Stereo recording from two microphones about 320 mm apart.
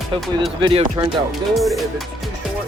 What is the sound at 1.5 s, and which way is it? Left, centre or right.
Speech, centre.